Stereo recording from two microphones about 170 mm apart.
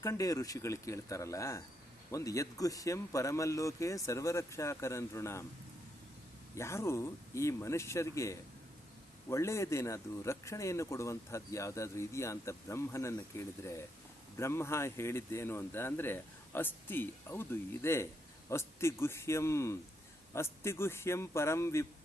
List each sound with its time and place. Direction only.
0.0 s speech: 20° left (ahead or behind)
6.6 s speech: 15° left (ahead or behind)